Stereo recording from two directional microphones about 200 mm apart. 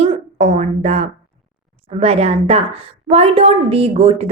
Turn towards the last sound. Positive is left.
turn(degrees=-30)  # may be behind; listen again after turning